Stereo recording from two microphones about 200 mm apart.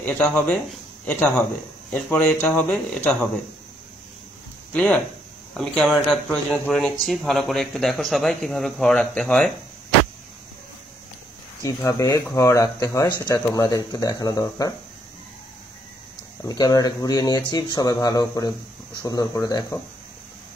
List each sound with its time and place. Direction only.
0.0 s a man's voice: 10° left (ahead or behind)
4.7 s speech: 5° left (ahead or behind)
11.6 s speech: 15° left (ahead or behind)
16.4 s speech: 20° left (ahead or behind)